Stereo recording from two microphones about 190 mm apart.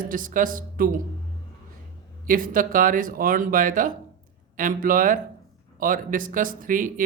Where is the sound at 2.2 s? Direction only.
45° right (ahead or behind).